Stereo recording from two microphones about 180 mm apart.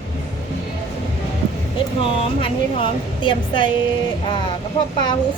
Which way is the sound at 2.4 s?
25° left (ahead or behind).